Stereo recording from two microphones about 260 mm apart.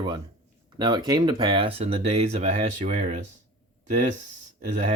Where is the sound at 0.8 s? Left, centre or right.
Centre.